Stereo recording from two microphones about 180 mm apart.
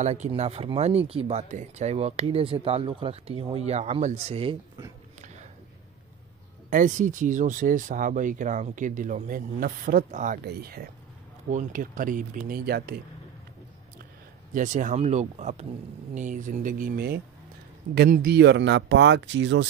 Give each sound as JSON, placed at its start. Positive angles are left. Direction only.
{"t": 0.0, "sound": "speech", "side_deg": -35}
{"t": 6.7, "sound": "speech", "side_deg": -45}
{"t": 10.4, "sound": "speech", "side_deg": -60}
{"t": 14.5, "sound": "speech", "side_deg": -45}